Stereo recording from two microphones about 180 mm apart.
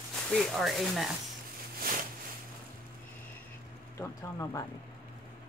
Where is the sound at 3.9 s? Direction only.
15° left (ahead or behind).